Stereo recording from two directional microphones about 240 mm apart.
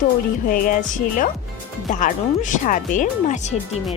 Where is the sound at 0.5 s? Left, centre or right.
Left.